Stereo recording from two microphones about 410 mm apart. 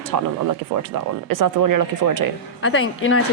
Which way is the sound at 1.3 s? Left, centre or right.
Right.